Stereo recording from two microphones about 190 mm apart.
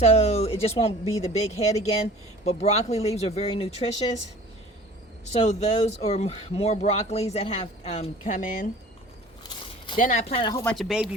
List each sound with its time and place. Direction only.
0.0 s speech: 35° left (ahead or behind)
5.3 s speech: 35° left (ahead or behind)
10.0 s speech: 40° left (ahead or behind)
10.5 s speech: 10° left (ahead or behind)
10.8 s speech: centre (ahead or behind)